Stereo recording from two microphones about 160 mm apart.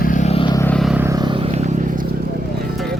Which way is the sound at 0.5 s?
15° left (ahead or behind).